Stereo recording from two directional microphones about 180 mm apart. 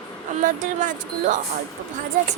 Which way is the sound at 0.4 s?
45° right (ahead or behind).